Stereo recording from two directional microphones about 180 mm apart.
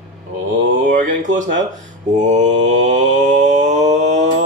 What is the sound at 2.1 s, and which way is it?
Mantra, 40° right (ahead or behind).